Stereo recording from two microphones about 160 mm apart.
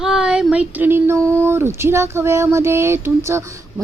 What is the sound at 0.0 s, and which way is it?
A woman's voice, 5° right (ahead or behind).